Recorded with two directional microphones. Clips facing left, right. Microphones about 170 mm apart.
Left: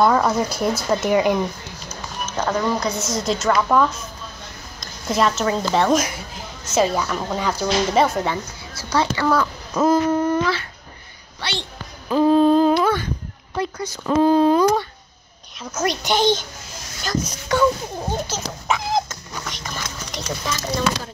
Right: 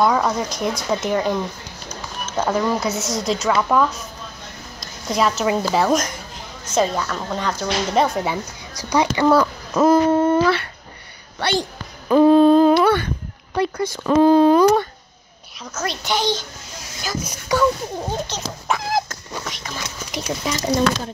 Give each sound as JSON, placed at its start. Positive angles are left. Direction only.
{"t": 0.0, "sound": "speech", "side_deg": 0}
{"t": 2.3, "sound": "a woman's voice", "side_deg": -10}
{"t": 8.9, "sound": "a child's voice", "side_deg": -15}
{"t": 10.1, "sound": "humming", "side_deg": -25}
{"t": 12.1, "sound": "a sound", "side_deg": -65}
{"t": 13.6, "sound": "speech", "side_deg": -65}
{"t": 15.7, "sound": "a child's voice", "side_deg": 15}
{"t": 17.0, "sound": "speech", "side_deg": -5}
{"t": 17.6, "sound": "a sound", "side_deg": 5}